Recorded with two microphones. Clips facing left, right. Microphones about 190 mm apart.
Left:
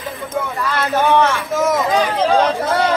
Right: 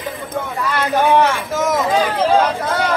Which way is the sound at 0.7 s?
15° right (ahead or behind).